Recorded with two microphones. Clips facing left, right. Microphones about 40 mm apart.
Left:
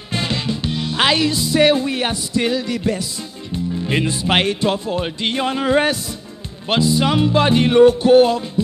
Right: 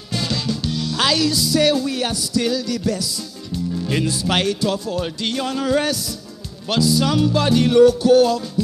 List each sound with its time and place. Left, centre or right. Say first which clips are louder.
0.1 s music: left 1 dB; left
3.8 s speech: left 2 dB; left